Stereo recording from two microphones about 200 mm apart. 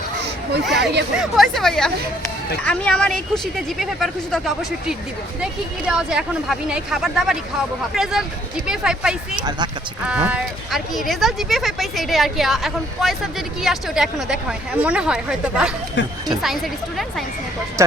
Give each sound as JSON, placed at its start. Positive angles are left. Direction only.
{"t": 0.7, "sound": "speech", "side_deg": -60}
{"t": 1.1, "sound": "speech", "side_deg": 0}
{"t": 16.0, "sound": "speech", "side_deg": 60}
{"t": 17.8, "sound": "speech", "side_deg": -15}